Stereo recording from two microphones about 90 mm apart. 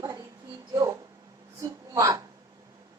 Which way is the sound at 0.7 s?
30° right (ahead or behind).